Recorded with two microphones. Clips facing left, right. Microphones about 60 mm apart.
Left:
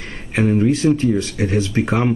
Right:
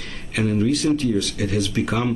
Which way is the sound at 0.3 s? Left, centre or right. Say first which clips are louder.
Left 4 dB; left.